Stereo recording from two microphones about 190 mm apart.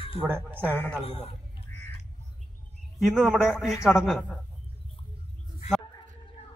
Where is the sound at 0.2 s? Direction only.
10° right (ahead or behind).